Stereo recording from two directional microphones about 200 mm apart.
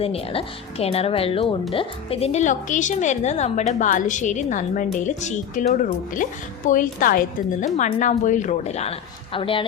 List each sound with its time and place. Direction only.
0.0 s speech: 30° left (ahead or behind)
6.7 s speech: 45° left (ahead or behind); by 9.6 s 25° left (ahead or behind)